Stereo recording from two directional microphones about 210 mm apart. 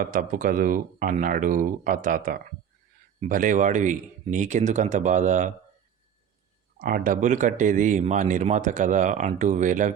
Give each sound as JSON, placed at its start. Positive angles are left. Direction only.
{"t": 0.0, "sound": "speech", "side_deg": -40}
{"t": 6.7, "sound": "speech", "side_deg": -45}